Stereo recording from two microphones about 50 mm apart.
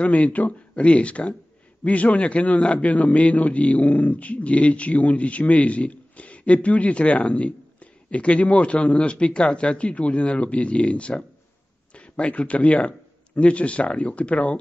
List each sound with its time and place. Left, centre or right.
0.0 s a man's voice: left